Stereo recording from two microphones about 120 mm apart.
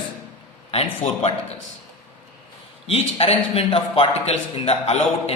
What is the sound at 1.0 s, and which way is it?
Speech, 75° left (ahead or behind).